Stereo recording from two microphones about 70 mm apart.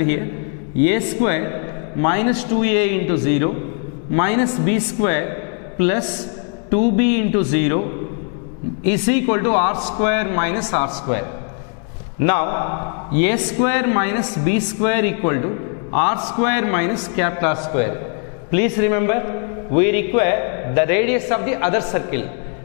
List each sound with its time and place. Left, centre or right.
0.0 s a man's voice: centre